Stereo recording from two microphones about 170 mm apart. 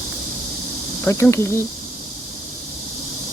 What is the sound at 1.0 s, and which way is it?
Speech, 15° left (ahead or behind).